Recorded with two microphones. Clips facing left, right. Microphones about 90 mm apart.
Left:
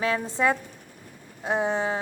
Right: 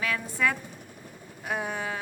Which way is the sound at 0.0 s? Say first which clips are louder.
Left 4 dB; 30° left (ahead or behind).